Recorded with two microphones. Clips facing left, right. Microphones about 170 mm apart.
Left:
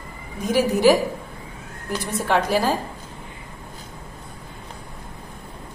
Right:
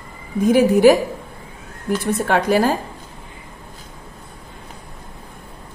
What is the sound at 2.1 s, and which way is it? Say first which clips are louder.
Speech: right 3 dB; 55° right (ahead or behind).